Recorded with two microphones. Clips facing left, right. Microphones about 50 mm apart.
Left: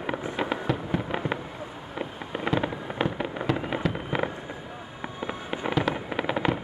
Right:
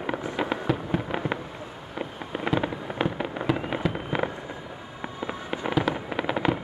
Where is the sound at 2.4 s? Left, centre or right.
Centre.